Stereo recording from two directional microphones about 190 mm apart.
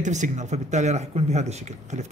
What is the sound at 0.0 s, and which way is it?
A man's voice, 40° right (ahead or behind).